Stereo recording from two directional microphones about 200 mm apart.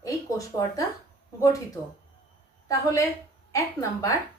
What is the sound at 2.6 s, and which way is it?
A woman's voice, 15° left (ahead or behind).